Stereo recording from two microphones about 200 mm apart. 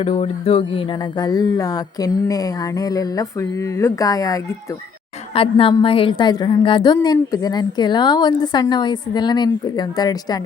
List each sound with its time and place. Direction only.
0.0 s a woman's voice: 30° left (ahead or behind)